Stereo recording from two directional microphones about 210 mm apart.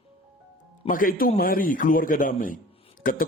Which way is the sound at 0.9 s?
40° left (ahead or behind).